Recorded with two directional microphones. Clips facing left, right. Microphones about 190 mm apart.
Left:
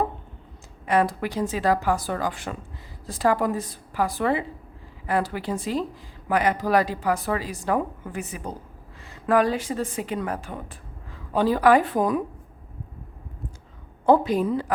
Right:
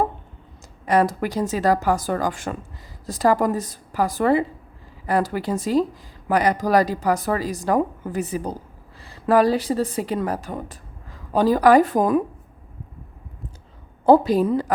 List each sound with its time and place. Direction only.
0.9 s a woman's voice: 40° right (ahead or behind)
14.0 s a woman's voice: 35° right (ahead or behind)